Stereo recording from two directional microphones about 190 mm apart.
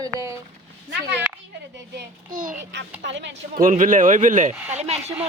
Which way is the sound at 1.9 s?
45° right (ahead or behind).